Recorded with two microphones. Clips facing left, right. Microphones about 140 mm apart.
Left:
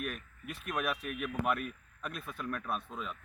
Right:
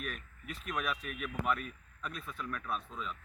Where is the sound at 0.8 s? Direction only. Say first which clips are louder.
Left 3 dB; 50° left (ahead or behind).